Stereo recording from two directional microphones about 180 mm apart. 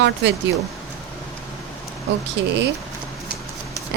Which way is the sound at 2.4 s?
75° right (ahead or behind).